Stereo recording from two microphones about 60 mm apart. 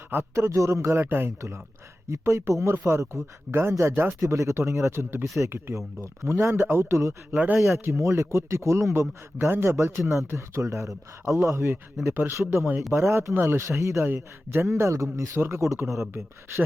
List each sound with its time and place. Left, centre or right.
0.1 s a man's voice: right
2.0 s a man's voice: right
4.3 s a man's voice: right
12.1 s a man's voice: right
15.4 s a man's voice: right